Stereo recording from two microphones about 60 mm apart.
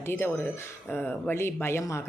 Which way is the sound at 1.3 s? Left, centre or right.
Left.